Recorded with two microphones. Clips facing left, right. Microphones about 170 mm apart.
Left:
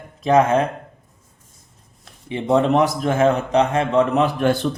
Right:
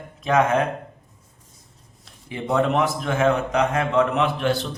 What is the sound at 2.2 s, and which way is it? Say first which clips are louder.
A man's voice: left 4 dB; 25° left (ahead or behind).